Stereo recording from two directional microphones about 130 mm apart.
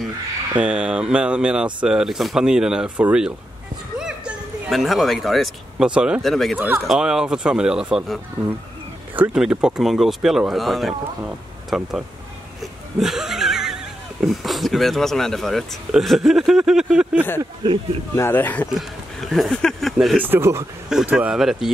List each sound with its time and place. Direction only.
0.6 s speech: 10° right (ahead or behind)
13.0 s neigh: centre (ahead or behind)
14.2 s speech: centre (ahead or behind)
17.6 s speech: 35° right (ahead or behind)
18.1 s speech: 15° left (ahead or behind)
18.7 s speech: centre (ahead or behind)
20.2 s speech: 15° right (ahead or behind)
20.9 s speech: 10° right (ahead or behind)